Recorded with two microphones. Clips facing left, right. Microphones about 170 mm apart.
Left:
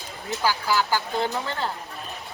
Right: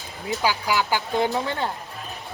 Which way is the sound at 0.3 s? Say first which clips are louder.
Right 1 dB; 15° right (ahead or behind).